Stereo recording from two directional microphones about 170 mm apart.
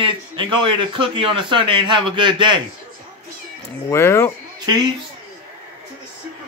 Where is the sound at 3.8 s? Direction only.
15° left (ahead or behind).